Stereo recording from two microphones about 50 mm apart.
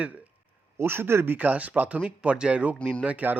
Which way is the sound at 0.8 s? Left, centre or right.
Right.